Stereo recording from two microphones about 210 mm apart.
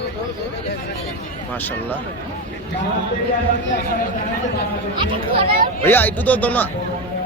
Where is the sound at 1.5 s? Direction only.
10° left (ahead or behind).